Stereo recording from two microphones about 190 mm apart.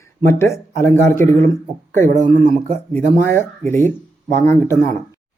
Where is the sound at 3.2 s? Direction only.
10° left (ahead or behind).